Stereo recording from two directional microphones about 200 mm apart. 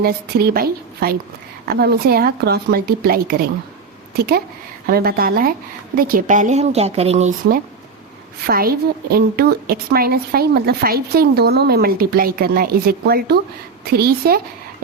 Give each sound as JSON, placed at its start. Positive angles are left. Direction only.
{"t": 0.0, "sound": "a woman's voice", "side_deg": -50}
{"t": 8.4, "sound": "a woman's voice", "side_deg": -50}